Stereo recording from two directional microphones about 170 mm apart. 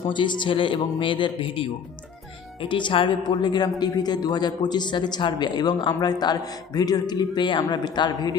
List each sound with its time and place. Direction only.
0.1 s speech: 30° left (ahead or behind)